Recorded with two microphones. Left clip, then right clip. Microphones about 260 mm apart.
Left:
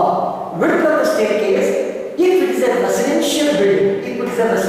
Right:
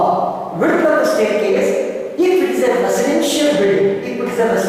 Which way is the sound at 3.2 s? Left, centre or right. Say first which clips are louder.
Right 1 dB; centre.